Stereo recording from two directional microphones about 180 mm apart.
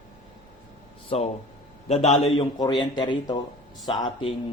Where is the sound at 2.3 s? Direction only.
25° left (ahead or behind).